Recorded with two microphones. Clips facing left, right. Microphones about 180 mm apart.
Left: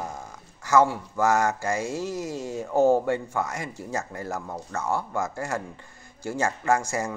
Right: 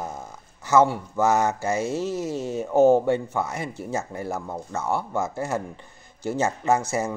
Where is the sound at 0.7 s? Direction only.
20° right (ahead or behind).